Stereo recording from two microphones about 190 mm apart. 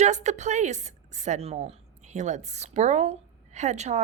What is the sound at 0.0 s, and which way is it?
A woman's voice, 35° right (ahead or behind).